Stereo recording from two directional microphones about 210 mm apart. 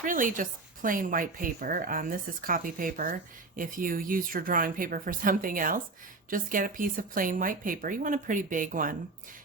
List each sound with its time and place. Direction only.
0.0 s speech: 40° right (ahead or behind)